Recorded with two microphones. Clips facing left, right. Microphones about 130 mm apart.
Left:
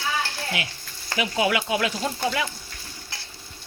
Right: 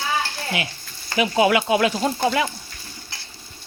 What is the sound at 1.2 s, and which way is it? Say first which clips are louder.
Speech: right 6 dB; 35° right (ahead or behind).